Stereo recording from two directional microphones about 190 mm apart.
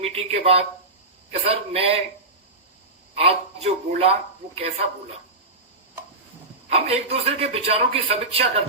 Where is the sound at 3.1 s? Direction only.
30° right (ahead or behind).